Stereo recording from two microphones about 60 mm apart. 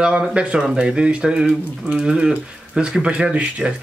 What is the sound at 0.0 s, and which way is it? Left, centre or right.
Speech, centre.